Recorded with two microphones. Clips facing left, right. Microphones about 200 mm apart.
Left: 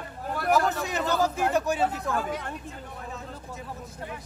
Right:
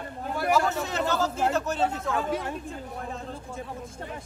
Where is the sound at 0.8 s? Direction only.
15° left (ahead or behind).